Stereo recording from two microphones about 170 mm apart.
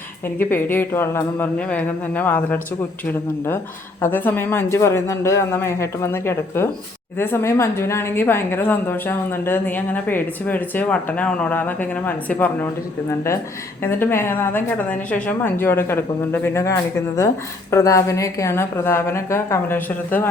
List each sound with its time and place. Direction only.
0.3 s a woman's voice: 10° left (ahead or behind)
4.0 s a woman's voice: 10° left (ahead or behind)
13.8 s a woman's voice: 15° left (ahead or behind)